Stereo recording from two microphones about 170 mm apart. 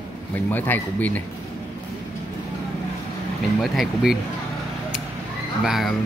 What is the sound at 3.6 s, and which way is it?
Speech, centre (ahead or behind).